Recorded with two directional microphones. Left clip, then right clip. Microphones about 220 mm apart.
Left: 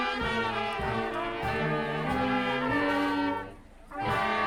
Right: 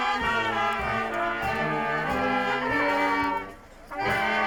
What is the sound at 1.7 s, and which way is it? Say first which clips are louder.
Music: right 4 dB; 5° right (ahead or behind).